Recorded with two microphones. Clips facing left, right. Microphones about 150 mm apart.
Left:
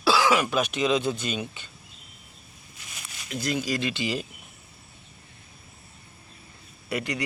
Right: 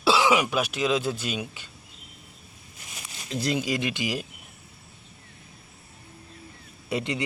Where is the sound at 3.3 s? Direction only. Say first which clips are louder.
Right 1 dB; 30° right (ahead or behind); by 4.2 s 10° right (ahead or behind).